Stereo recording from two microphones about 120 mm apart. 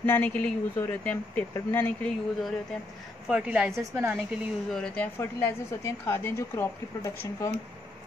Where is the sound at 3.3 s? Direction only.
10° right (ahead or behind).